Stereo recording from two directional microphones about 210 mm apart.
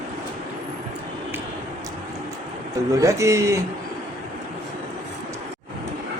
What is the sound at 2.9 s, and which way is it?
Speech, 15° right (ahead or behind).